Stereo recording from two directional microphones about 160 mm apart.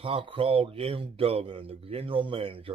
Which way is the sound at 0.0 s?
30° right (ahead or behind).